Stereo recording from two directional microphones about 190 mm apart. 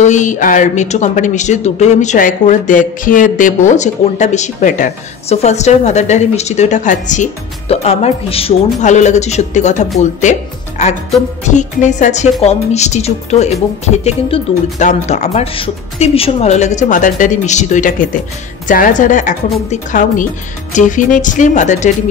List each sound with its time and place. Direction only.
0.0 s a woman's voice: 40° left (ahead or behind)